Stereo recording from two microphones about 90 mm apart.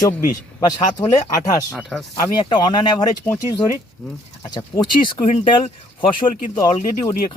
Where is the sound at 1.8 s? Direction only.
Centre (ahead or behind).